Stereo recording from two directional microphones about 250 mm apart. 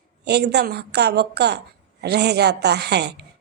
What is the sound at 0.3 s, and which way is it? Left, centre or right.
A woman's voice, right.